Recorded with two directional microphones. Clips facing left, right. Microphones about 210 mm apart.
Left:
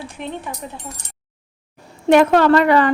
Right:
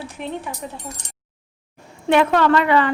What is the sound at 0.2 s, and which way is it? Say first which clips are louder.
Speech: even; 5° right (ahead or behind).